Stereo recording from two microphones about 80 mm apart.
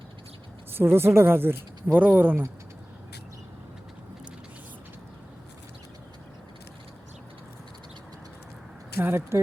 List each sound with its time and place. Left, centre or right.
0.8 s speech: right
9.0 s speech: right